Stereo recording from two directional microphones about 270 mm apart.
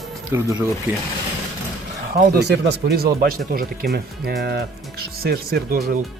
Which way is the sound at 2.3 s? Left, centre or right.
Right.